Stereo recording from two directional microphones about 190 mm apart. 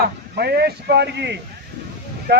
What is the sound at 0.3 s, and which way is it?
A man's voice, 60° right (ahead or behind).